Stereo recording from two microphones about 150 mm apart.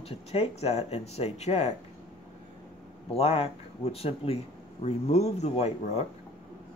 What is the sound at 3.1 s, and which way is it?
Speech, 40° left (ahead or behind).